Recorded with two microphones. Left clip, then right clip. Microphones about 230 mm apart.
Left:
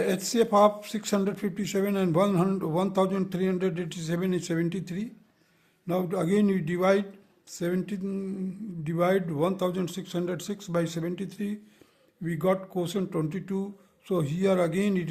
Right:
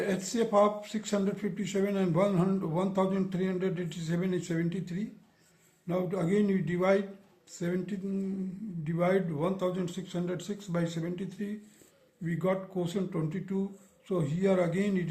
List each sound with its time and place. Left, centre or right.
0.0 s speech: left